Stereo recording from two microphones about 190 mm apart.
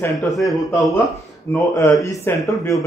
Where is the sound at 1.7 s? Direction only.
15° left (ahead or behind).